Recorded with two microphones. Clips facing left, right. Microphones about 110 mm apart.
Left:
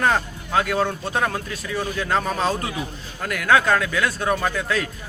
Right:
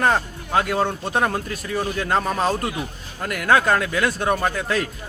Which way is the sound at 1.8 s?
10° right (ahead or behind).